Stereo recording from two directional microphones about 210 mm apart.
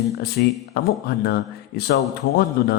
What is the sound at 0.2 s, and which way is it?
A man's voice, 50° left (ahead or behind).